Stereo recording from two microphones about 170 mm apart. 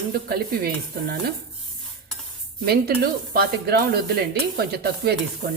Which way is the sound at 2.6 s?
65° right (ahead or behind).